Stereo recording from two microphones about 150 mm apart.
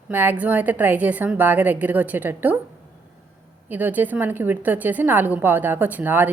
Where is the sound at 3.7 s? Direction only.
10° right (ahead or behind).